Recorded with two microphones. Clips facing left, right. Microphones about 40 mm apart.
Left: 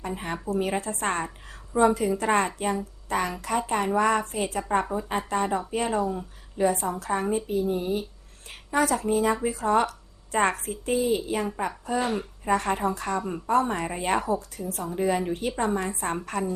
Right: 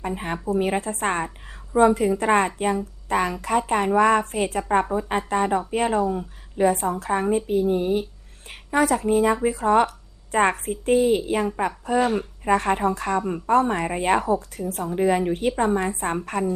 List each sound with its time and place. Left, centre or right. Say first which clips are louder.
0.5 s a woman's voice: right 4 dB; right
10.9 s a woman's voice: right 5 dB; right